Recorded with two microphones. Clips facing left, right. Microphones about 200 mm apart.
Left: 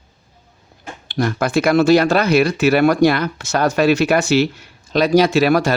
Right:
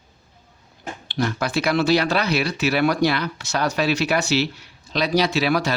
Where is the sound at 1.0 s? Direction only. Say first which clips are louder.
Left 5 dB; 50° left (ahead or behind).